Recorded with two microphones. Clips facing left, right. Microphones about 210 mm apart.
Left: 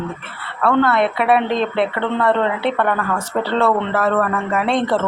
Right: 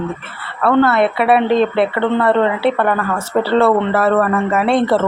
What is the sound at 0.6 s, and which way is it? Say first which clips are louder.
A woman's voice: right 3 dB; 5° right (ahead or behind).